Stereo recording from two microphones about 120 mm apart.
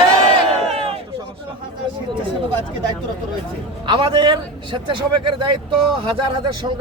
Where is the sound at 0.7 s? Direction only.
55° right (ahead or behind).